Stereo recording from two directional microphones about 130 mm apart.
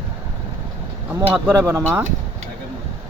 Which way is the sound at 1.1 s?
15° right (ahead or behind).